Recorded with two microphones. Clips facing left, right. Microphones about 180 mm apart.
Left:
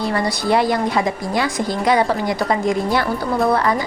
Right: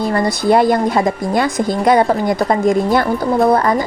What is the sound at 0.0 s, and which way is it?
A woman's voice, 50° right (ahead or behind).